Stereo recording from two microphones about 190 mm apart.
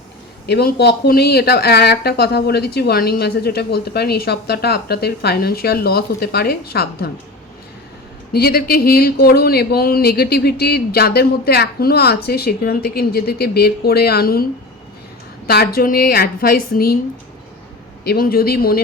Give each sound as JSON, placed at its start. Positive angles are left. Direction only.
{"t": 0.4, "sound": "speech", "side_deg": 60}
{"t": 8.3, "sound": "speech", "side_deg": 55}
{"t": 15.4, "sound": "a woman's voice", "side_deg": 55}
{"t": 18.0, "sound": "a woman's voice", "side_deg": 55}